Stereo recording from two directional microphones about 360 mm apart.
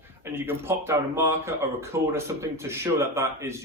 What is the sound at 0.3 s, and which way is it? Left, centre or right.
A man's voice, centre.